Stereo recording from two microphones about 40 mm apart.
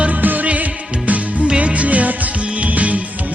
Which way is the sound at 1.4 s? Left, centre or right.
Right.